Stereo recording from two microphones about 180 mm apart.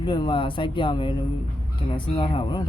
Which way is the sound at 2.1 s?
30° left (ahead or behind).